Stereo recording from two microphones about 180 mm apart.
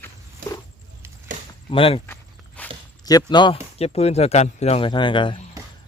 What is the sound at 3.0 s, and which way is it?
Speech, 25° left (ahead or behind).